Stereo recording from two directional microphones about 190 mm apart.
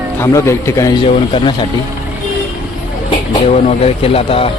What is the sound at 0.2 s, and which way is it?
Speech, 15° left (ahead or behind).